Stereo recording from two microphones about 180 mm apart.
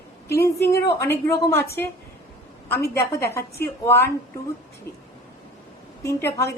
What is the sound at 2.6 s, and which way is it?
A woman's voice, 15° left (ahead or behind).